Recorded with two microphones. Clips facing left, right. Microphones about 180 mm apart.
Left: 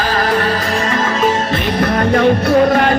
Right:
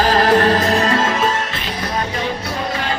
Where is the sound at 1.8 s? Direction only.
60° left (ahead or behind).